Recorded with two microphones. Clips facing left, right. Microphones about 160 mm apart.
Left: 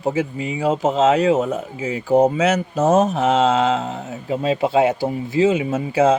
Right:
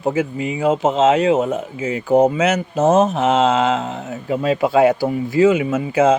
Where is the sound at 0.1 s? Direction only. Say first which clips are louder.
Right 2 dB; 30° left (ahead or behind).